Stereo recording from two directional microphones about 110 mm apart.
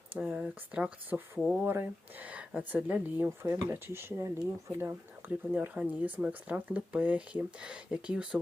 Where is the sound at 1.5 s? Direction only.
20° right (ahead or behind).